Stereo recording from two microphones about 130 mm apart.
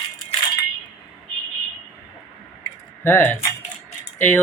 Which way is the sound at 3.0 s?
15° left (ahead or behind).